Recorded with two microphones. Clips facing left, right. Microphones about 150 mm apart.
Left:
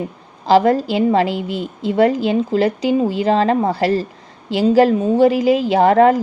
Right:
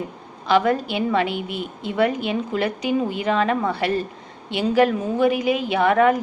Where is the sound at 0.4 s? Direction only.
35° left (ahead or behind).